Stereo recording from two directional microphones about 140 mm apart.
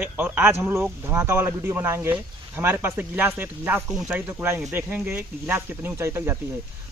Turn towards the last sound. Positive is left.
turn(degrees=-15)  # may be behind; listen again after turning